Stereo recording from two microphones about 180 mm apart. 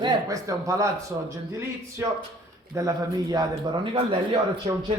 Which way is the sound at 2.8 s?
20° right (ahead or behind).